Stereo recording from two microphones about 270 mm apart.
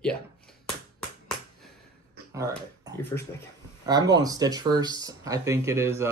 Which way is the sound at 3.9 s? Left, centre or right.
Centre.